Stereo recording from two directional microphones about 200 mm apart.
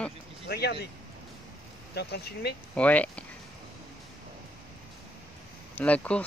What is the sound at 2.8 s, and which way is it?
Speech, 5° left (ahead or behind).